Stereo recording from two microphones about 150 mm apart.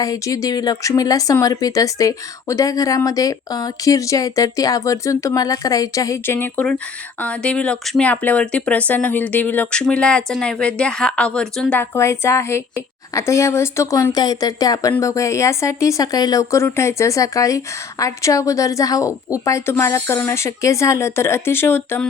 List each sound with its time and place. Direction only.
0.0 s speech: 20° left (ahead or behind); by 11.8 s 5° left (ahead or behind)
11.8 s speech: 20° left (ahead or behind)